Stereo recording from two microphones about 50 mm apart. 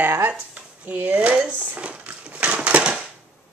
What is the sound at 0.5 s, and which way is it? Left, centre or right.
Dishes, right.